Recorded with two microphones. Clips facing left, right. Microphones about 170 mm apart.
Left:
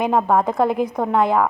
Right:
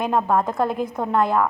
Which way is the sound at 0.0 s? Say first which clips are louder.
Left 3 dB; 15° left (ahead or behind).